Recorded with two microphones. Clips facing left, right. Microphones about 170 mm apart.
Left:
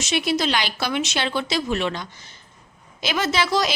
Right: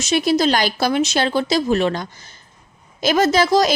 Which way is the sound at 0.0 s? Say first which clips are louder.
Right 6 dB; 40° right (ahead or behind).